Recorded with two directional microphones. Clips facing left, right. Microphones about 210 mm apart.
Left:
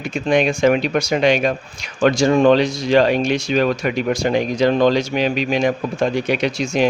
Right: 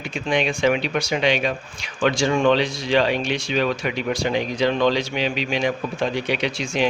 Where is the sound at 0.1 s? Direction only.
45° left (ahead or behind).